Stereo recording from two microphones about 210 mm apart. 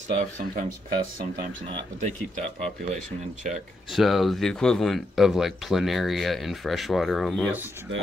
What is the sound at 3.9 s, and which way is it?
Speech, centre (ahead or behind).